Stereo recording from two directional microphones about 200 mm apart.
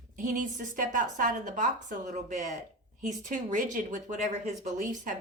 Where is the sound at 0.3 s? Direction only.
40° right (ahead or behind).